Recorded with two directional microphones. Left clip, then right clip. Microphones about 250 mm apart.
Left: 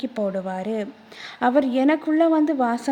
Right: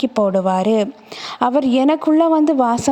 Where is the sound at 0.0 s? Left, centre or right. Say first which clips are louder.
Right 10 dB; right.